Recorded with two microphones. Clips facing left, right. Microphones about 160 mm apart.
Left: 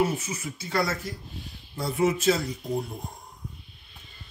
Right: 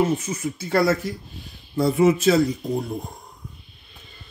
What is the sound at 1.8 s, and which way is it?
Speech, 90° right.